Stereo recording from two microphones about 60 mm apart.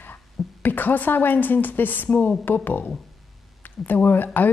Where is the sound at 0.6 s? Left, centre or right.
Left.